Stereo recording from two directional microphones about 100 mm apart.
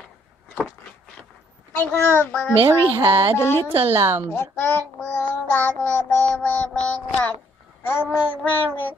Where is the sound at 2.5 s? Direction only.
55° right (ahead or behind).